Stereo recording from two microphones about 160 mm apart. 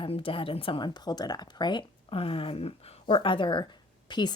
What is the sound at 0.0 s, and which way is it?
A woman's voice, 35° left (ahead or behind).